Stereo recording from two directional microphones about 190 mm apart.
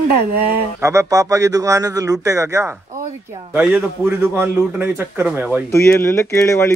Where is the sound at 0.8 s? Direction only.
15° right (ahead or behind).